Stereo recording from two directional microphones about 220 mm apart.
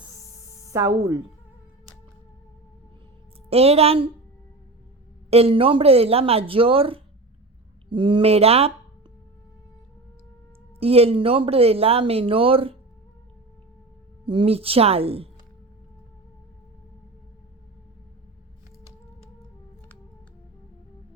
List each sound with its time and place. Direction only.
0.7 s speech: 15° right (ahead or behind)
3.5 s speech: 25° right (ahead or behind)
5.3 s speech: 25° right (ahead or behind)
10.8 s speech: 25° right (ahead or behind)
14.3 s speech: 25° right (ahead or behind)